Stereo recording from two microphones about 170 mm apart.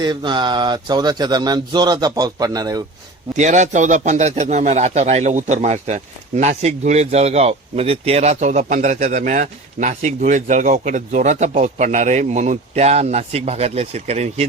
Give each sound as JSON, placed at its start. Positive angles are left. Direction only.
{"t": 0.0, "sound": "speech", "side_deg": -25}
{"t": 3.3, "sound": "speech", "side_deg": -45}